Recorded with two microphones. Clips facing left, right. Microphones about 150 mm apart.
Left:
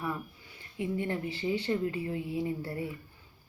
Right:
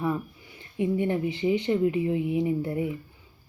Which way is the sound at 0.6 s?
20° right (ahead or behind).